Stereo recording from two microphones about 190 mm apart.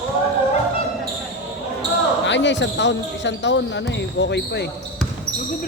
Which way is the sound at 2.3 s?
70° left (ahead or behind).